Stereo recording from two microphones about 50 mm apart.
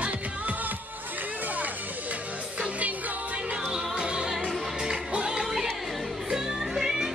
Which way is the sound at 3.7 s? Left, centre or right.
Centre.